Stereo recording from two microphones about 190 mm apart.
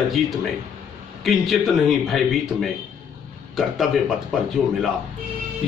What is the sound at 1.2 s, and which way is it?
Speech, centre (ahead or behind).